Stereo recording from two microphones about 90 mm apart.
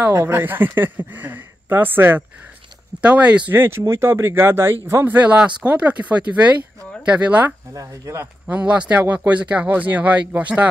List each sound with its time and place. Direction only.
0.1 s speech: 25° right (ahead or behind)
7.7 s speech: 40° right (ahead or behind)
8.5 s speech: 15° right (ahead or behind)